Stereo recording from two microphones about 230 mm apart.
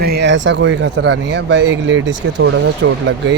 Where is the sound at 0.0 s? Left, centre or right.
Right.